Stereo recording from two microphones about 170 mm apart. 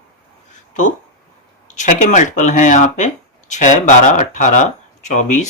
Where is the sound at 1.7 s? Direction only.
45° left (ahead or behind).